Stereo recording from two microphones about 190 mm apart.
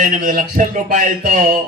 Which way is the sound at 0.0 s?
45° right (ahead or behind).